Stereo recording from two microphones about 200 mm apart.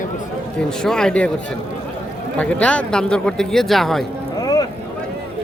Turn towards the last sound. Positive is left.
turn(degrees=20)  # may be behind; listen again after turning